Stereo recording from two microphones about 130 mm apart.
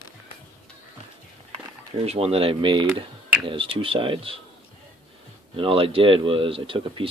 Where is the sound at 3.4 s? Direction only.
40° right (ahead or behind).